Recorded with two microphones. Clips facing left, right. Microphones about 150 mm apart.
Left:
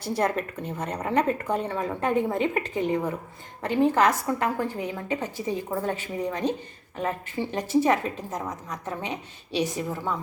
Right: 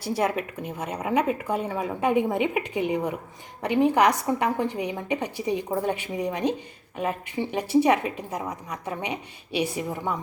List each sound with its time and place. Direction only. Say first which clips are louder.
0.0 s a woman's voice: even; 10° right (ahead or behind)